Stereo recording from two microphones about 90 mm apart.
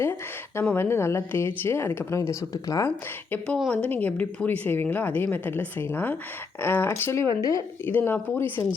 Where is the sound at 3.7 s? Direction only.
15° left (ahead or behind).